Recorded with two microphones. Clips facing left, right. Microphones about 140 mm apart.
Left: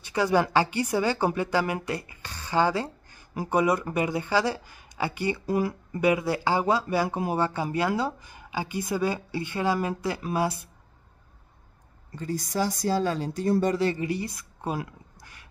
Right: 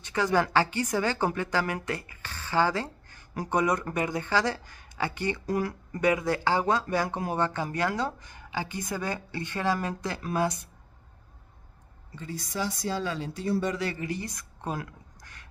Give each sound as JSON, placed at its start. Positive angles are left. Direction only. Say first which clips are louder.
{"t": 0.0, "sound": "a woman's voice", "louder": "left 2 dB", "side_deg": 10}
{"t": 12.2, "sound": "speech", "louder": "left 5 dB", "side_deg": 40}
{"t": 13.9, "sound": "a woman's voice", "louder": "left 4 dB", "side_deg": 15}